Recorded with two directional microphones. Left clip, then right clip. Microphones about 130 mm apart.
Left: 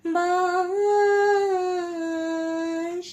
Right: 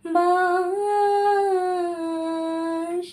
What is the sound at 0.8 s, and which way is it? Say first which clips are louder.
Humming: left 2 dB; 35° right (ahead or behind).